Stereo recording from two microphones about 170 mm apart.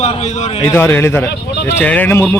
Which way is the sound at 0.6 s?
15° left (ahead or behind).